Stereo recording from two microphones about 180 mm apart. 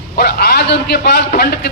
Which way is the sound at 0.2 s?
65° left (ahead or behind).